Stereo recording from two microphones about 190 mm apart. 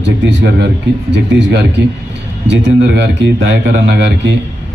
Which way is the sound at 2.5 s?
65° right (ahead or behind).